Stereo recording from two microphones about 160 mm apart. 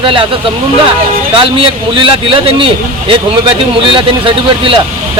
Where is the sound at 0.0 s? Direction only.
35° right (ahead or behind).